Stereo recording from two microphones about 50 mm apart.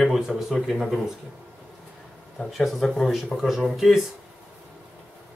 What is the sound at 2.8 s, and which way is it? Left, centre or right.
Speech, centre.